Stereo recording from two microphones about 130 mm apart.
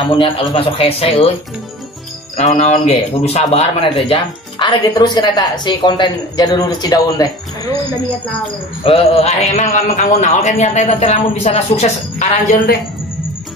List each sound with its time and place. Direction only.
0.1 s a man's voice: 40° left (ahead or behind)
2.3 s a man's voice: 60° left (ahead or behind)
4.6 s speech: 35° left (ahead or behind)
8.8 s a man's voice: 50° left (ahead or behind)